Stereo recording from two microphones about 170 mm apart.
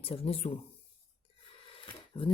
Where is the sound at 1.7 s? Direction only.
30° left (ahead or behind).